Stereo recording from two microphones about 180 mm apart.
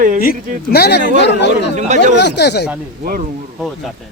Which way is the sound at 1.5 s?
40° right (ahead or behind).